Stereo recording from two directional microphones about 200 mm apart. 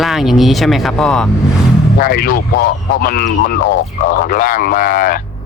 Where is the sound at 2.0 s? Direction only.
45° left (ahead or behind).